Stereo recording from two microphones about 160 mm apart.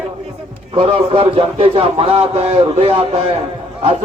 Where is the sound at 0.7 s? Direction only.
35° right (ahead or behind).